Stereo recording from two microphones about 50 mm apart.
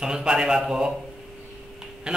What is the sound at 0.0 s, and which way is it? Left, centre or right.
Speech, centre.